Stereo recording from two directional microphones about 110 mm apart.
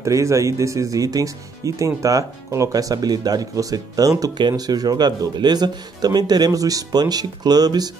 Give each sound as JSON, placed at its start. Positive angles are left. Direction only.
{"t": 0.0, "sound": "speech", "side_deg": -30}